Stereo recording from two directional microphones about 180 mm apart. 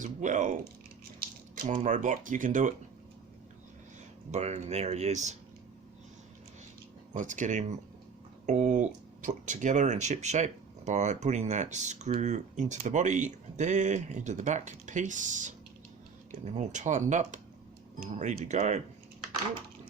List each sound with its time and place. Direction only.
0.0 s speech: 45° right (ahead or behind)
4.3 s speech: 40° right (ahead or behind)
7.1 s speech: 45° right (ahead or behind)